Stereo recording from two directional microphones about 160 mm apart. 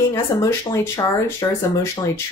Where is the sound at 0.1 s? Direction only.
20° left (ahead or behind).